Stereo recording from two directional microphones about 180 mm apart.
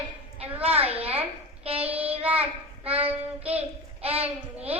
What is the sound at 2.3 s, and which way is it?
Child singing, 35° right (ahead or behind).